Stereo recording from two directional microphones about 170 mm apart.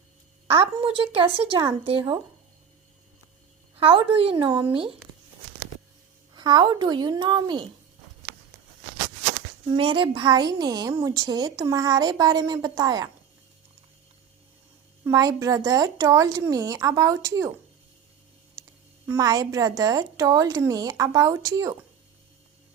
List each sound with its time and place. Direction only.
0.4 s speech: 35° right (ahead or behind)
3.8 s speech: 35° right (ahead or behind)
6.3 s a woman's voice: 25° right (ahead or behind)
9.7 s a woman's voice: 30° right (ahead or behind)
15.0 s a woman's voice: 20° right (ahead or behind)
18.6 s a sound: 20° right (ahead or behind)
19.0 s a woman's voice: 20° right (ahead or behind)